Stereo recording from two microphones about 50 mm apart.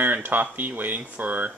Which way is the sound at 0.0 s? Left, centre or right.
Right.